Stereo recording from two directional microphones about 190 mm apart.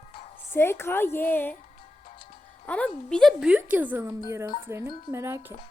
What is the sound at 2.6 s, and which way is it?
A woman's voice, 5° left (ahead or behind).